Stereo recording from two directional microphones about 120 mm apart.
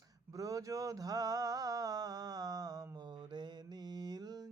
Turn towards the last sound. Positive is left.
turn(degrees=-35)  # may be behind; listen again after turning